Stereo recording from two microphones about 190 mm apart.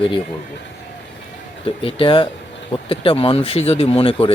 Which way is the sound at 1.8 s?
30° left (ahead or behind).